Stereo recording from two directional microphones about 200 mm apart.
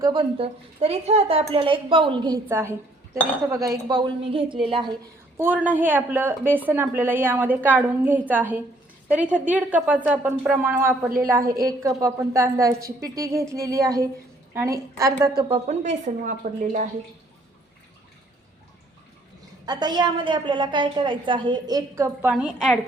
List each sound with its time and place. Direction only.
0.0 s a woman's voice: 25° right (ahead or behind)
5.4 s a woman's voice: 10° right (ahead or behind)
15.4 s speech: 30° right (ahead or behind)
19.6 s a woman's voice: 20° right (ahead or behind); by 22.8 s 5° right (ahead or behind)